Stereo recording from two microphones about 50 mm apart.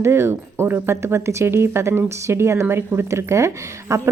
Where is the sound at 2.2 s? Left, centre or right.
Right.